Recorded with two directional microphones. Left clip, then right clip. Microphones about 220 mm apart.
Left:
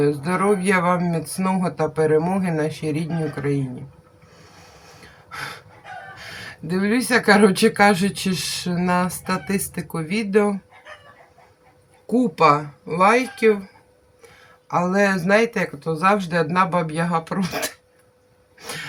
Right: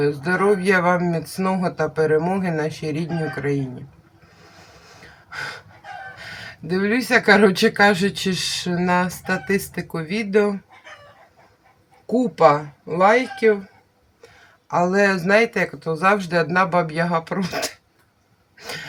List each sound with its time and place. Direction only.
0.0 s speech: 5° right (ahead or behind)
5.3 s gasp: 5° right (ahead or behind)
6.1 s speech: 5° right (ahead or behind)
12.0 s speech: centre (ahead or behind)
14.7 s speech: 5° right (ahead or behind)
18.6 s a sound: 10° right (ahead or behind)